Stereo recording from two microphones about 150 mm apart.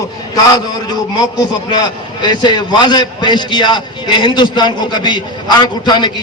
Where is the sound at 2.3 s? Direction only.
30° left (ahead or behind).